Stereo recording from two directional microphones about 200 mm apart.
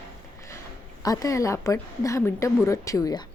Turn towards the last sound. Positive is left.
turn(degrees=15)  # may be behind; listen again after turning